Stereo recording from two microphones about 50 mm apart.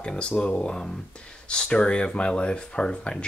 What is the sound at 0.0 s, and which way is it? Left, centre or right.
Speech, centre.